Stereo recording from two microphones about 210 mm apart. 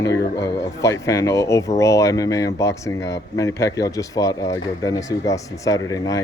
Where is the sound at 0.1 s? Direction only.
55° left (ahead or behind).